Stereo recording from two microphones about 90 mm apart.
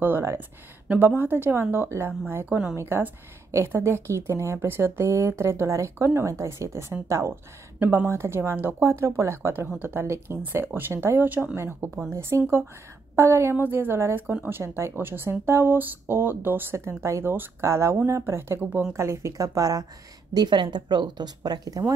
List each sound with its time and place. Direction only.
0.0 s speech: 25° right (ahead or behind)
7.8 s speech: 20° right (ahead or behind)
11.5 s speech: 30° right (ahead or behind)
18.6 s speech: 20° right (ahead or behind)
18.9 s speech: 30° right (ahead or behind)
20.3 s speech: 55° right (ahead or behind); by 21.9 s 40° right (ahead or behind)